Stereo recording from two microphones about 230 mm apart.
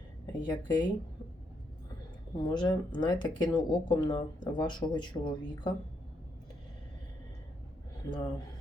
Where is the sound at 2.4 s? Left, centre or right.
Centre.